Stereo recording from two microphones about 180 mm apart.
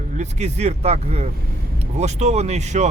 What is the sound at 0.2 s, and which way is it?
Speech, 40° right (ahead or behind).